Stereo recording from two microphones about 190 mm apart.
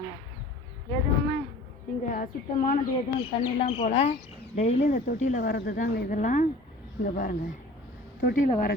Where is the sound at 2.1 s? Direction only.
40° left (ahead or behind).